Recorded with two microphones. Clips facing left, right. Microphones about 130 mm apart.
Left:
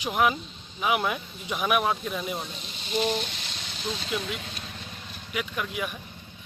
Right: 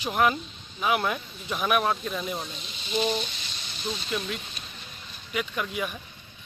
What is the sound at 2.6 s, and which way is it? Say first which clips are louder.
Speech: even; 45° left (ahead or behind).